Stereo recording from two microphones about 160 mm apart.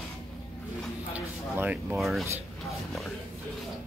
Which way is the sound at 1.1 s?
10° right (ahead or behind).